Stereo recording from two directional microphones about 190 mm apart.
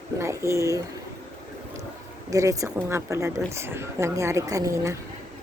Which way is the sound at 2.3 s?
15° right (ahead or behind).